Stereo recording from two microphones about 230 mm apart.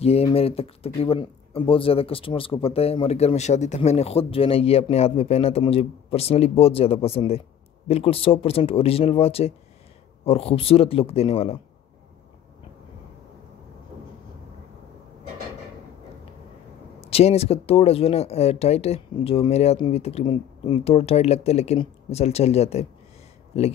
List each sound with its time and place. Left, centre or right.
0.0 s speech: left
17.0 s speech: left